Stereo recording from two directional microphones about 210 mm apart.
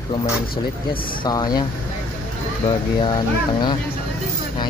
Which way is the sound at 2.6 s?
25° left (ahead or behind).